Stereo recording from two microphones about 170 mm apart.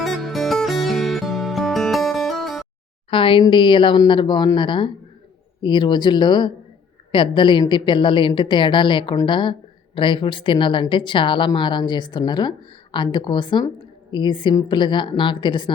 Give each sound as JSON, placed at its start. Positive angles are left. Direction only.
{"t": 0.0, "sound": "music", "side_deg": 0}
{"t": 3.1, "sound": "a woman's voice", "side_deg": 30}